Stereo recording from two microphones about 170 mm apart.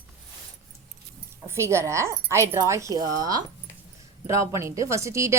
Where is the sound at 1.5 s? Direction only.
15° right (ahead or behind).